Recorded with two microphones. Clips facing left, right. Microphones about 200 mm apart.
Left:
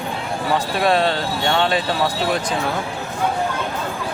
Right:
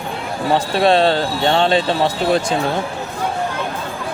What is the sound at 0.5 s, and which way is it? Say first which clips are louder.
Speech: right 4 dB; 30° right (ahead or behind).